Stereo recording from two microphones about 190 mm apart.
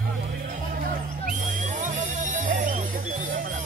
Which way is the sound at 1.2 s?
40° right (ahead or behind).